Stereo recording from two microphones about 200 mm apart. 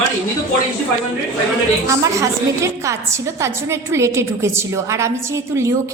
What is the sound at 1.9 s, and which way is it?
A woman's voice, 15° right (ahead or behind).